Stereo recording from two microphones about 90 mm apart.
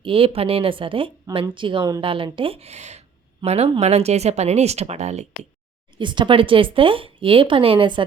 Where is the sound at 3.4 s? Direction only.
60° right (ahead or behind).